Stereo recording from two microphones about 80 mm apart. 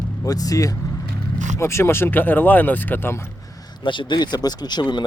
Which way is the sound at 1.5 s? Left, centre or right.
Left.